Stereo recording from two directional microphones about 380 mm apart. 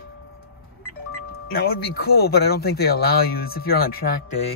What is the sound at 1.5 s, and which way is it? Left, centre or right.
Speech, left.